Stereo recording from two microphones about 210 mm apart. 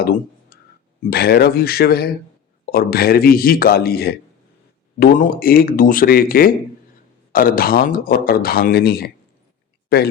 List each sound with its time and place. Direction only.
0.5 s music: 45° left (ahead or behind)
1.1 s speech: 50° left (ahead or behind)